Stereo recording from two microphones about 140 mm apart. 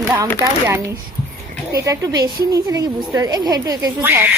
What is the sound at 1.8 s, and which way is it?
A woman's voice, 25° right (ahead or behind).